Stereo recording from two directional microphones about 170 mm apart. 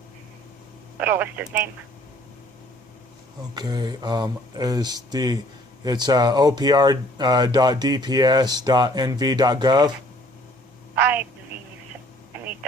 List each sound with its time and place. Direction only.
1.0 s speech: 10° right (ahead or behind)
3.5 s speech: 25° right (ahead or behind)
10.9 s speech: 10° right (ahead or behind)